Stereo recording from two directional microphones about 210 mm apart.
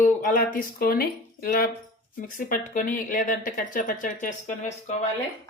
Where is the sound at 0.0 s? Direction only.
40° left (ahead or behind).